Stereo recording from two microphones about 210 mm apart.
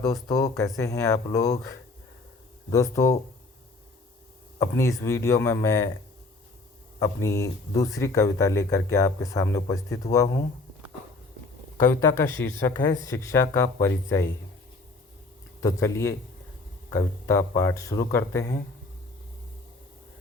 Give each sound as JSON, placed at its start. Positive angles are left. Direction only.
{"t": 0.0, "sound": "speech", "side_deg": 15}
{"t": 2.6, "sound": "speech", "side_deg": 15}
{"t": 4.6, "sound": "speech", "side_deg": 15}
{"t": 7.0, "sound": "speech", "side_deg": 15}
{"t": 11.8, "sound": "speech", "side_deg": 15}
{"t": 15.6, "sound": "speech", "side_deg": 15}